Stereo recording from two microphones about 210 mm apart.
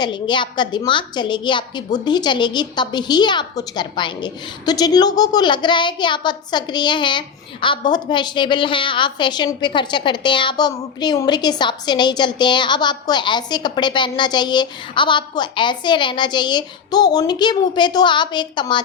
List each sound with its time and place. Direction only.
0.0 s a woman's voice: 20° left (ahead or behind)